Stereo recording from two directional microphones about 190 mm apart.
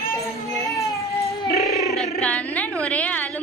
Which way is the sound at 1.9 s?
Centre (ahead or behind).